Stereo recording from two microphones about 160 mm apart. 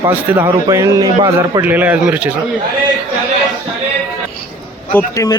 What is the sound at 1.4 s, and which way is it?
Speech, 15° right (ahead or behind).